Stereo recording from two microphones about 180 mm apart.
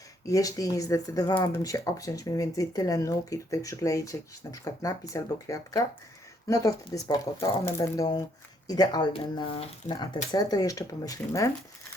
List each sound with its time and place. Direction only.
0.3 s speech: 20° left (ahead or behind)